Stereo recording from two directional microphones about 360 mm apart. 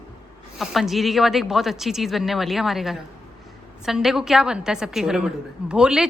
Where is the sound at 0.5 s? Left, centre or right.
Centre.